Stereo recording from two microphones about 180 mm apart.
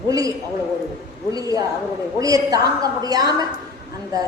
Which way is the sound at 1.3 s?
20° right (ahead or behind).